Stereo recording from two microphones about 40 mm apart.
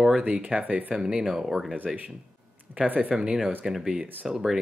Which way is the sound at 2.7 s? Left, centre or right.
Right.